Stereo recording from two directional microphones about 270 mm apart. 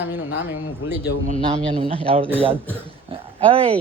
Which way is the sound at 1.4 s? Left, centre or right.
Centre.